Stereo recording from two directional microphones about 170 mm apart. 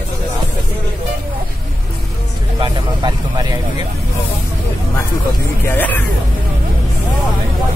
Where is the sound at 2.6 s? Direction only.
25° right (ahead or behind).